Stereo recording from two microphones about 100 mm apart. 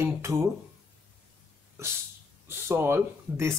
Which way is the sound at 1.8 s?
30° right (ahead or behind).